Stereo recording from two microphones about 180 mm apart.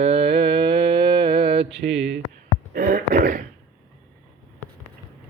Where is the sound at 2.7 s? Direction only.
50° right (ahead or behind).